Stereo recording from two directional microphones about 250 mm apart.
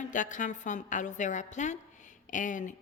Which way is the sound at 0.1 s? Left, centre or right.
Left.